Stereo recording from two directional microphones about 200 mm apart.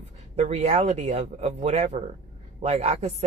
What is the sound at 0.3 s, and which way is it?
A woman's voice, 35° right (ahead or behind).